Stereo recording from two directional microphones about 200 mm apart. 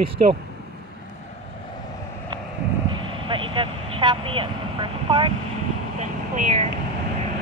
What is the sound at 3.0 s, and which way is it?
Speech, 25° right (ahead or behind).